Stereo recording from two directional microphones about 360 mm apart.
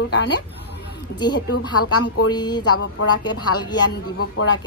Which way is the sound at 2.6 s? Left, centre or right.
Left.